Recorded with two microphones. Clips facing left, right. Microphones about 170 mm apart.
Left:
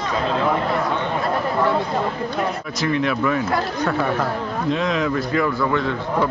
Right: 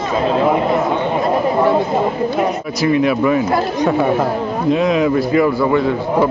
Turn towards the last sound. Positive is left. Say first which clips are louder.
# right 6 dB
turn(degrees=-10)  # may be behind; listen again after turning